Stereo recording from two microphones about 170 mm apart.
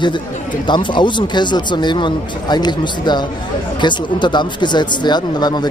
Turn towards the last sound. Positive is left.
turn(degrees=25)  # may be behind; listen again after turning